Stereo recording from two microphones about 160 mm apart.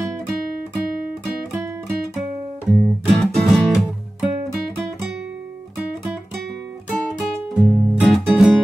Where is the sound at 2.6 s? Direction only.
Centre (ahead or behind).